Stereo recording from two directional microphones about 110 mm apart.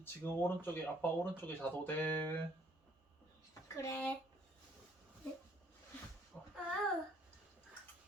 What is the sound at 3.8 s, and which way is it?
Speech, 25° left (ahead or behind).